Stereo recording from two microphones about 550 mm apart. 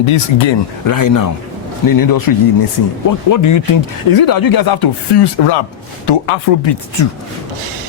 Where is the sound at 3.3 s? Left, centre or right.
Left.